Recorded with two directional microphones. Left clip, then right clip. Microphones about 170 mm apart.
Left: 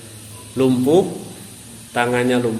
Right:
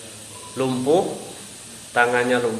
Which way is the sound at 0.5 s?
45° left (ahead or behind).